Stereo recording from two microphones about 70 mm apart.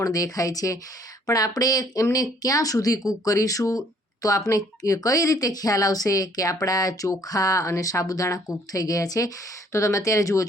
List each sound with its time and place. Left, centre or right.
0.0 s speech: left